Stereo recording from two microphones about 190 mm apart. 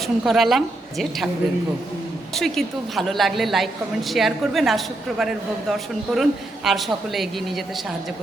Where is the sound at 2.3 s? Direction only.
Centre (ahead or behind).